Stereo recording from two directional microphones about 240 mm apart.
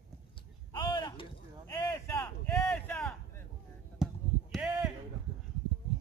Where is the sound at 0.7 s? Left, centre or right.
Centre.